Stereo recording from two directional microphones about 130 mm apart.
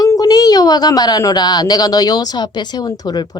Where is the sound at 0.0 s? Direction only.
30° left (ahead or behind).